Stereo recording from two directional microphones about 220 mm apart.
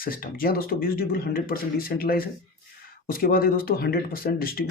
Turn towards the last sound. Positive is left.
turn(degrees=45)  # may be behind; listen again after turning